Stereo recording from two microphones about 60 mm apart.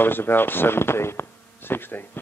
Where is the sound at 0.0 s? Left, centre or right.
Left.